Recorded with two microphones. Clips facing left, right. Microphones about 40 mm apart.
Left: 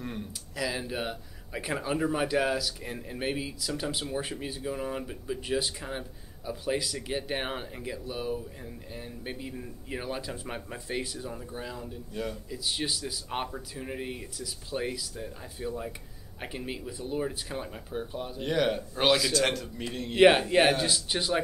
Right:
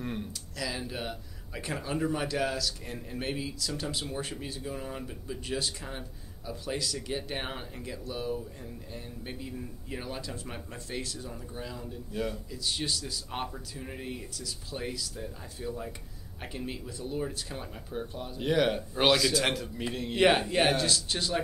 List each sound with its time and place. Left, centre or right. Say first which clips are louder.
0.0 s a sound: right 1 dB; centre
0.6 s speech: left 3 dB; centre
12.1 s a man's voice: right 2 dB; centre
12.4 s speech: left 1 dB; centre
18.4 s a man's voice: right 1 dB; centre